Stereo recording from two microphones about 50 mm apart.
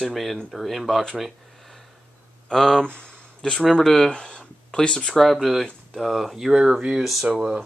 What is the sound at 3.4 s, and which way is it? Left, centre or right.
Speech, centre.